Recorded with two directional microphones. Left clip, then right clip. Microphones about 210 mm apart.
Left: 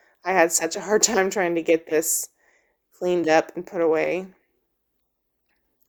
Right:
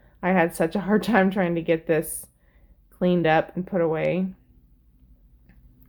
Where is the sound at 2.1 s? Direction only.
35° left (ahead or behind).